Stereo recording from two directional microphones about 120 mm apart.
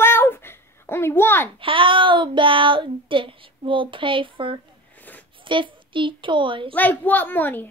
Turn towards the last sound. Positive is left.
turn(degrees=15)  # may be behind; listen again after turning